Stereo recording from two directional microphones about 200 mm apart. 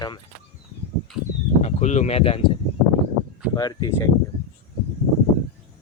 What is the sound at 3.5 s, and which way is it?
Speech, 20° left (ahead or behind).